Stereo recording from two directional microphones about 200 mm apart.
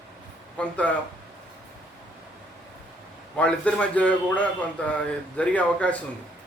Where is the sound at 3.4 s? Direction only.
5° left (ahead or behind).